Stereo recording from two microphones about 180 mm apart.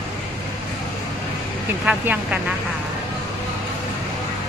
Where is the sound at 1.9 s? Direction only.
5° right (ahead or behind).